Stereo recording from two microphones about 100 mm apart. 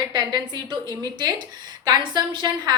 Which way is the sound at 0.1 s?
45° right (ahead or behind).